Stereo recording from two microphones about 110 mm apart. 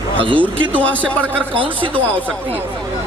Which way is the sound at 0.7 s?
15° left (ahead or behind).